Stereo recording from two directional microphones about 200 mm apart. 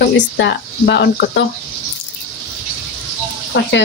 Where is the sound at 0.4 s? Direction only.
60° left (ahead or behind).